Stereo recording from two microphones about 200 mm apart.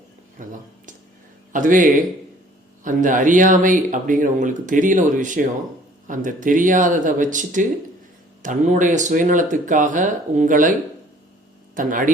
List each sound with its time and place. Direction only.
0.4 s speech: 40° right (ahead or behind)
1.5 s a man's voice: 40° right (ahead or behind)